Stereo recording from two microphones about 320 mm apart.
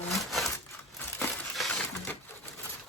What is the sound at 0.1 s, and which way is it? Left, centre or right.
Crushing, centre.